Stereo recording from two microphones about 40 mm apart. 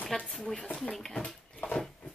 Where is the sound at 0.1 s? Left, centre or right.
Centre.